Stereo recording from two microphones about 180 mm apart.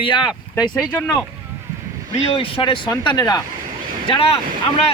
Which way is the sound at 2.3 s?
30° left (ahead or behind).